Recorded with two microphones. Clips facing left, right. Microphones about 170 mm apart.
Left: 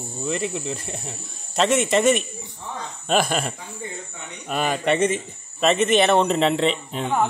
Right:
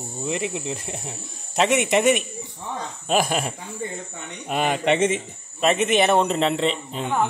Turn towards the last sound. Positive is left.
turn(degrees=0)  # may be behind; listen again after turning